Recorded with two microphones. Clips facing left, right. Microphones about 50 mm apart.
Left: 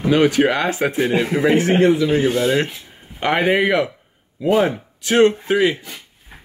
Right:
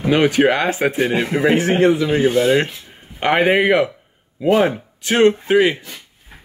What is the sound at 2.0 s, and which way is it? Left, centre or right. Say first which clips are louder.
Speech: right 2 dB; centre.